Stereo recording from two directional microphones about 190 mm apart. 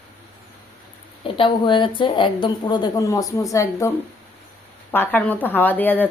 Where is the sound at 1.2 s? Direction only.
25° left (ahead or behind).